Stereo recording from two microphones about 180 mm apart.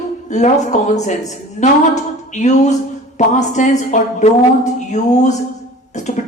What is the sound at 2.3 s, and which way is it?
A woman's voice, 40° left (ahead or behind).